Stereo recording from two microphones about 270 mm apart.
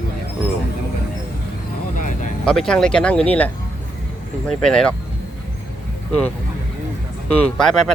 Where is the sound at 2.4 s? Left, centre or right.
Centre.